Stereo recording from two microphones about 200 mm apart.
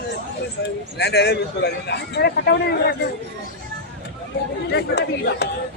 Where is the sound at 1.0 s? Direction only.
55° left (ahead or behind).